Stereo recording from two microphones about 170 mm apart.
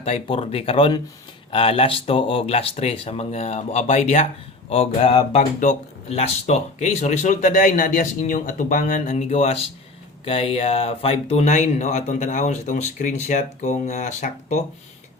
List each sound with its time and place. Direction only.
0.0 s speech: 35° left (ahead or behind)